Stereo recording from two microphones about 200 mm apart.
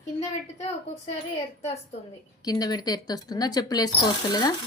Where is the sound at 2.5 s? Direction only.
20° left (ahead or behind).